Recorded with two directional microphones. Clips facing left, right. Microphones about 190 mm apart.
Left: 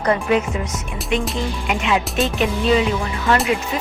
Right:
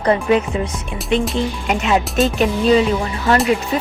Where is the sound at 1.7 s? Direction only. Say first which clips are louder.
Right 2 dB; 40° right (ahead or behind).